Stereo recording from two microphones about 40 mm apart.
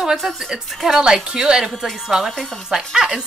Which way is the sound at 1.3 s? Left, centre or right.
Centre.